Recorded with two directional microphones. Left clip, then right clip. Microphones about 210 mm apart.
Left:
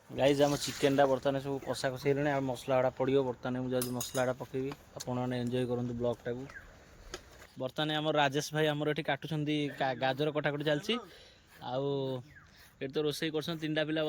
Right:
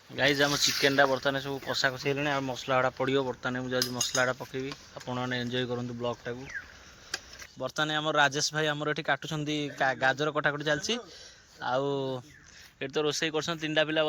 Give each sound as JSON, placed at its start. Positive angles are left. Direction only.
{"t": 0.2, "sound": "speech", "side_deg": 5}
{"t": 7.6, "sound": "speech", "side_deg": 10}